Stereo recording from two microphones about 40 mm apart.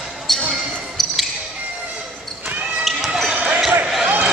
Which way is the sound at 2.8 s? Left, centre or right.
Centre.